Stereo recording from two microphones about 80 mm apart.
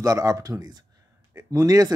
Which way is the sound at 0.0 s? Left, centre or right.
Right.